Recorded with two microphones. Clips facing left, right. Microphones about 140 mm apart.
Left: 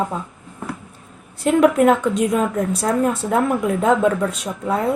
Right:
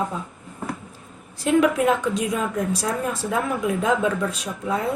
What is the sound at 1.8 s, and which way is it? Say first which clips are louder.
A woman's voice: left 5 dB; 55° left (ahead or behind).